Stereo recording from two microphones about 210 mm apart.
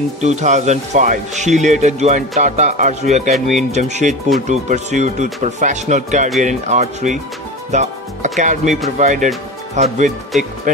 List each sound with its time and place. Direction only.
0.2 s speech: 35° right (ahead or behind)